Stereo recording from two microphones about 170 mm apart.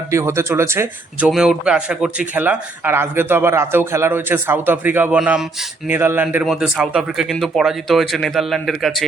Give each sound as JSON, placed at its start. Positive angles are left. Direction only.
{"t": 0.1, "sound": "speech", "side_deg": -15}
{"t": 1.3, "sound": "a man's voice", "side_deg": -5}